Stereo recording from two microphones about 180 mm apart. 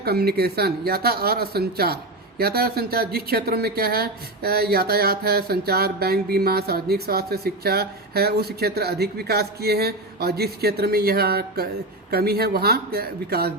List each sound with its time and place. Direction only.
0.0 s speech: 60° right (ahead or behind)